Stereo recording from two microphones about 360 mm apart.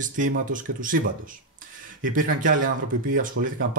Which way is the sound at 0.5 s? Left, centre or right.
Right.